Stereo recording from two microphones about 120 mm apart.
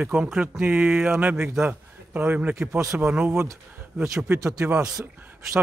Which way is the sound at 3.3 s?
20° right (ahead or behind).